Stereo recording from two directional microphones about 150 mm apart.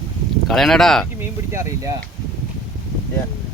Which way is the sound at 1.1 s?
20° right (ahead or behind).